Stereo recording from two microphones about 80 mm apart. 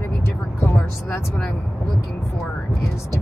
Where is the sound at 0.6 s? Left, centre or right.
Left.